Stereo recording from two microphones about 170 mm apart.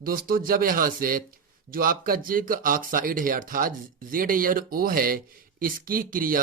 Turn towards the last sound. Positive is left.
turn(degrees=-55)  # may be behind; listen again after turning